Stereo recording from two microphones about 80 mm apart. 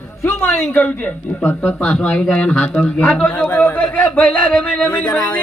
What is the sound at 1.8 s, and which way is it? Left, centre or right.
A man's voice, centre.